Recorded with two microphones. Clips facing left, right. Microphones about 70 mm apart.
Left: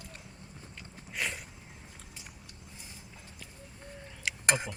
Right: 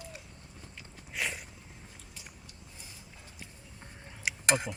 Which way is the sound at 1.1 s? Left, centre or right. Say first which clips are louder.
Even; centre.